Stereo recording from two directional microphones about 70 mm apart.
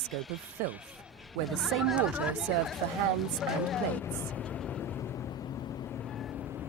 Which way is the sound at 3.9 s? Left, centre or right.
Left.